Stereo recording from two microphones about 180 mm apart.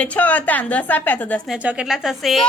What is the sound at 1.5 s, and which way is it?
Speech, 5° right (ahead or behind).